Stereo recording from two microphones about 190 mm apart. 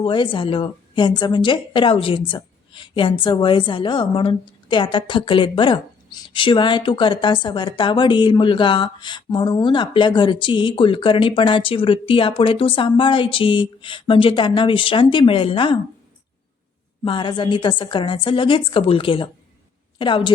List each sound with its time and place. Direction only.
0.0 s a woman's voice: 25° left (ahead or behind)
17.0 s a woman's voice: 25° left (ahead or behind)